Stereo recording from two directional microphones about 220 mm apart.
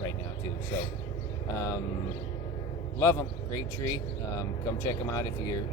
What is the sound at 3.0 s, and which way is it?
Speech, 15° left (ahead or behind).